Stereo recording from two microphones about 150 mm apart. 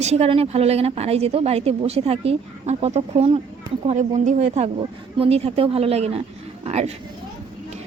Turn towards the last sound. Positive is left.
turn(degrees=-45)  # may be behind; listen again after turning